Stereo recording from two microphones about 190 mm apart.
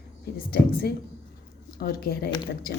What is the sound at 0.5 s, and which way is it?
A woman's voice, 50° left (ahead or behind).